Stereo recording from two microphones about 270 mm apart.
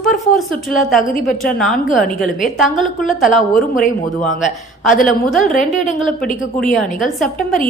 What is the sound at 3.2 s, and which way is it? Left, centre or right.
Speech, left.